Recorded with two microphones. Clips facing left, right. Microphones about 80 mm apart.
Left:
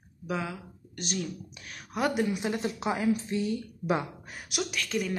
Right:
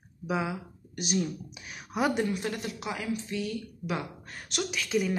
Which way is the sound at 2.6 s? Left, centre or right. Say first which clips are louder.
Left 6 dB; left.